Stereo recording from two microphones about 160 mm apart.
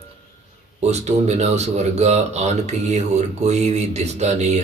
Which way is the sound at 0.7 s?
45° right (ahead or behind).